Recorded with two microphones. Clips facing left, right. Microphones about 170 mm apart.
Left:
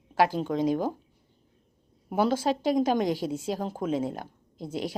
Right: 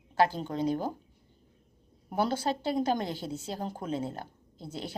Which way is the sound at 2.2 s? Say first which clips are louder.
Left 4 dB; 90° left.